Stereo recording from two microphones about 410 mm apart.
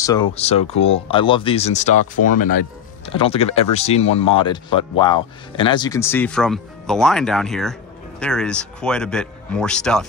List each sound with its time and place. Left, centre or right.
0.0 s speech: centre